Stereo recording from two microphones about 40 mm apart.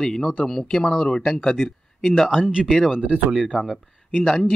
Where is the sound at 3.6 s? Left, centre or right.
Centre.